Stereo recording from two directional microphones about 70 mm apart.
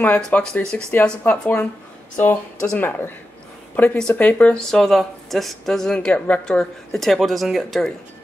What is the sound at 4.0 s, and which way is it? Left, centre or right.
Speech, centre.